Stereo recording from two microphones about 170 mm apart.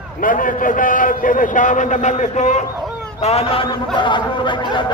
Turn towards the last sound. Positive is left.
turn(degrees=30)  # may be behind; listen again after turning